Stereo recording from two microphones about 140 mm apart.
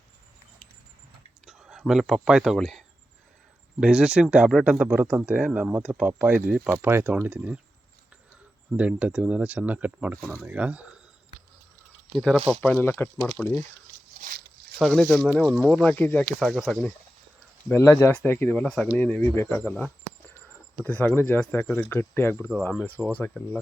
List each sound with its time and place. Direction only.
1.5 s speech: 5° right (ahead or behind)
8.7 s speech: 10° right (ahead or behind)
12.1 s speech: centre (ahead or behind)
14.8 s speech: centre (ahead or behind)
16.4 s speech: centre (ahead or behind)
17.7 s speech: 20° left (ahead or behind)
22.7 s speech: 10° right (ahead or behind)
23.1 s speech: 10° left (ahead or behind)